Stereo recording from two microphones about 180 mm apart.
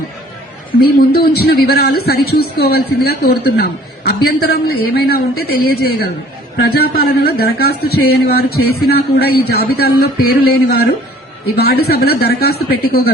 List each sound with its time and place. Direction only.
0.8 s a man's voice: 60° left (ahead or behind)